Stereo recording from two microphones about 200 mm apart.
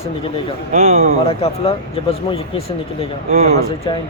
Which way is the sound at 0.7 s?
30° right (ahead or behind).